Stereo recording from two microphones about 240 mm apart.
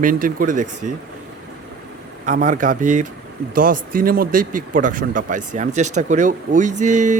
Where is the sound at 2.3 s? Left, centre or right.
Right.